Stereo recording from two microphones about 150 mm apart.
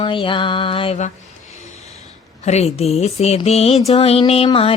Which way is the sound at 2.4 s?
45° left (ahead or behind).